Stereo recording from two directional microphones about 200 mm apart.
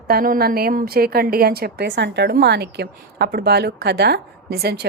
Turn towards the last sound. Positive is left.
turn(degrees=-55)  # may be behind; listen again after turning